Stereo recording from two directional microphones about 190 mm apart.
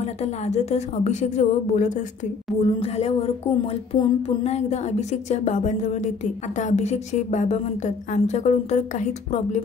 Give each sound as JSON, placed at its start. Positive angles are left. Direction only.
{"t": 0.0, "sound": "speech", "side_deg": 35}